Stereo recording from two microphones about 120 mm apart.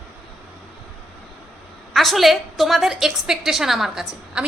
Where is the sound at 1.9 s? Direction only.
Centre (ahead or behind).